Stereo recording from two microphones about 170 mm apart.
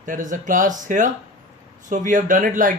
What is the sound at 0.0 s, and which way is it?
Speech, 50° right (ahead or behind).